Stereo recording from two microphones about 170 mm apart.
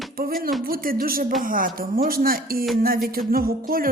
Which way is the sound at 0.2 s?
60° right (ahead or behind).